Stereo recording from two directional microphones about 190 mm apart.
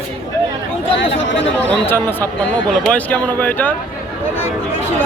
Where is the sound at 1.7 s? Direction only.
10° left (ahead or behind).